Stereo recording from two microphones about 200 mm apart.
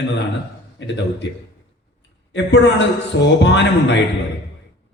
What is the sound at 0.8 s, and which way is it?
Speech, 60° left (ahead or behind).